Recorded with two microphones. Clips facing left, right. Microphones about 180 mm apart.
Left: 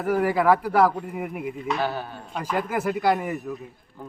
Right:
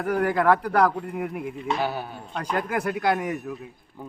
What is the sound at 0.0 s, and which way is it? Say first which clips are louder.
A man's voice: left 1 dB; 5° left (ahead or behind).